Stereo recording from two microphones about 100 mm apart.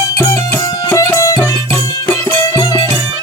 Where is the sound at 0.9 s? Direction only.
30° left (ahead or behind).